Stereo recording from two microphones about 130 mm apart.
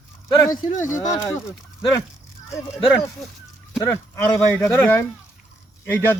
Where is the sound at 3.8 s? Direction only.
20° left (ahead or behind).